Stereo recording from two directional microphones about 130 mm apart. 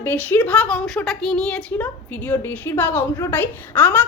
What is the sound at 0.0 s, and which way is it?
A woman's voice, 15° left (ahead or behind).